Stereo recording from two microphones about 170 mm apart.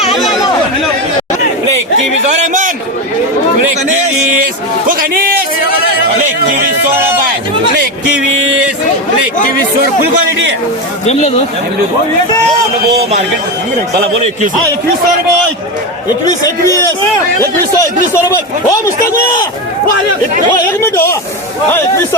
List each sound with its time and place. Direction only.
11.0 s speech: 40° left (ahead or behind)
16.4 s speech: 20° left (ahead or behind)